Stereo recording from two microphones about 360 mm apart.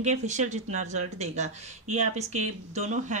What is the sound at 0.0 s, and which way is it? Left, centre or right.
Speech, centre.